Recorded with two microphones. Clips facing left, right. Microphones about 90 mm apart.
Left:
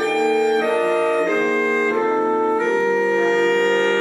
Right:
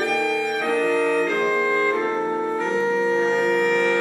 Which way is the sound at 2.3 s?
50° left (ahead or behind).